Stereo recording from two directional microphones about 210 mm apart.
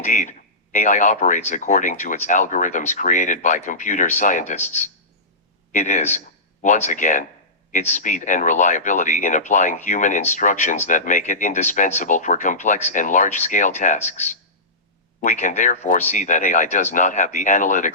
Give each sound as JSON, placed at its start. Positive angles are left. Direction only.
{"t": 0.0, "sound": "speech", "side_deg": 35}